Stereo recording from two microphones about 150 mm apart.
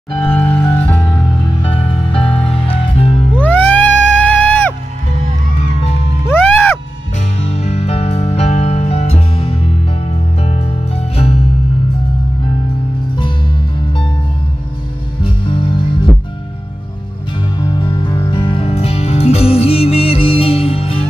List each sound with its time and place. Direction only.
0.3 s music: 10° left (ahead or behind)
1.8 s music: 40° left (ahead or behind)
3.3 s music: 10° left (ahead or behind)
6.2 s music: 15° left (ahead or behind)
7.3 s music: 45° left (ahead or behind)
15.2 s music: 35° left (ahead or behind)
17.6 s music: 30° left (ahead or behind)